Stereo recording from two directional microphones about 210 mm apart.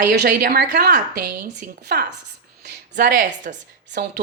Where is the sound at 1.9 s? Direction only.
50° right (ahead or behind).